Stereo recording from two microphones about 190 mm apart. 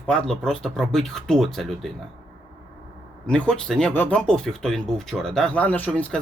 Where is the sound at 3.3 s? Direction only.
5° left (ahead or behind).